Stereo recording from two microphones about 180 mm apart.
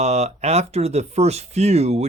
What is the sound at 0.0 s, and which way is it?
Speech, 40° right (ahead or behind).